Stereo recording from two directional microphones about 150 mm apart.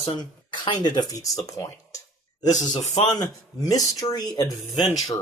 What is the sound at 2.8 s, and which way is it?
Speech, 45° left (ahead or behind).